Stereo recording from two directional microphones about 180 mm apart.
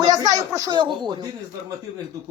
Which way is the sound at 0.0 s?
20° right (ahead or behind).